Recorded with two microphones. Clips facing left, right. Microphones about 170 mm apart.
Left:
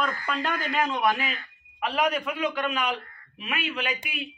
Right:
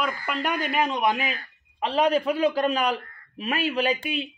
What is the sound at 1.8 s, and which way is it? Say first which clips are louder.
A man's voice: right 4 dB; 30° right (ahead or behind).